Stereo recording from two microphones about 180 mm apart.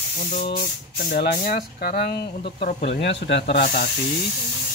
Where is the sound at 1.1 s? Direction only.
55° left (ahead or behind).